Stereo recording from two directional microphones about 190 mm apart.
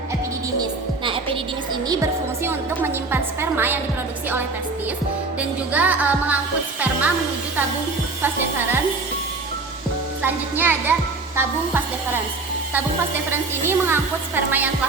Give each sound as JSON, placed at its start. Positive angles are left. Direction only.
{"t": 1.0, "sound": "music", "side_deg": -30}
{"t": 1.9, "sound": "a woman's voice", "side_deg": -15}
{"t": 5.4, "sound": "a woman's voice", "side_deg": -10}
{"t": 8.2, "sound": "a woman's voice", "side_deg": -10}
{"t": 10.2, "sound": "a woman's voice", "side_deg": -10}
{"t": 13.3, "sound": "a woman's voice", "side_deg": -10}